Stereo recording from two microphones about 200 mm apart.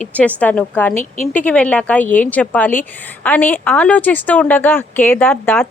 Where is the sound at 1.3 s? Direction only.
5° left (ahead or behind).